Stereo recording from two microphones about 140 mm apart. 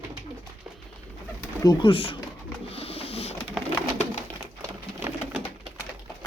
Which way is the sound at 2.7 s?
45° left (ahead or behind).